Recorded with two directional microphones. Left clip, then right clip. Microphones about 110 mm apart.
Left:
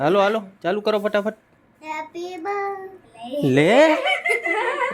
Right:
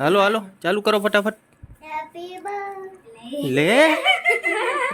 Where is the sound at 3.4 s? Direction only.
15° left (ahead or behind).